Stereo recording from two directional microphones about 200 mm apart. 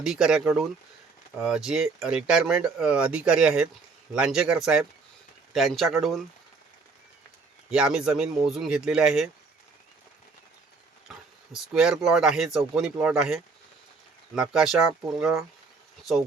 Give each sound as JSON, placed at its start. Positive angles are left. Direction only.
{"t": 0.0, "sound": "speech", "side_deg": 0}
{"t": 7.7, "sound": "speech", "side_deg": -5}
{"t": 11.1, "sound": "a sound", "side_deg": 0}
{"t": 11.5, "sound": "speech", "side_deg": -5}
{"t": 16.1, "sound": "speech", "side_deg": 0}